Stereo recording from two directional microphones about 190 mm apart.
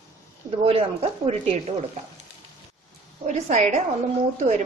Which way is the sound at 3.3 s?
40° right (ahead or behind).